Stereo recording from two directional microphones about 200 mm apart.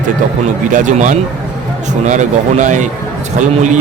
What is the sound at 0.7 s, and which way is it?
A man's voice, 40° right (ahead or behind).